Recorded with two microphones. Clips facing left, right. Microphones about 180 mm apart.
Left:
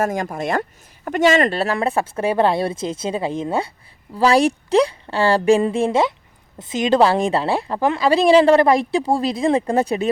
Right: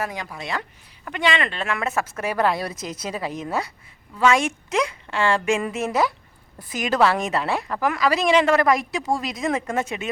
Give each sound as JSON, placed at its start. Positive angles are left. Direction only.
{"t": 0.0, "sound": "a woman's voice", "side_deg": 45}